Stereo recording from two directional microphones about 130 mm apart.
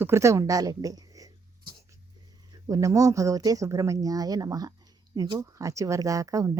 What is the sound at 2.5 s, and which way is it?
Speech, 25° right (ahead or behind).